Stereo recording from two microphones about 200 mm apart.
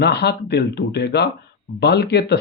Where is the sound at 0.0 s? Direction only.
55° left (ahead or behind).